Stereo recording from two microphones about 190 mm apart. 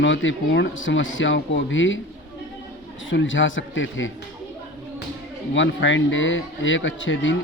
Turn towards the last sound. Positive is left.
turn(degrees=80)